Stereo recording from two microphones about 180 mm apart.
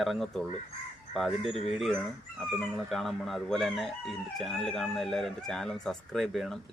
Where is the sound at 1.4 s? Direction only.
35° left (ahead or behind).